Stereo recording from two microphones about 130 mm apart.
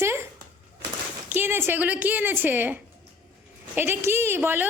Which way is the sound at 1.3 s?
15° right (ahead or behind).